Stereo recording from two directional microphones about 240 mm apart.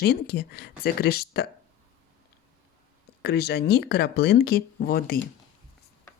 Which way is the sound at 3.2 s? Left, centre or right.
Left.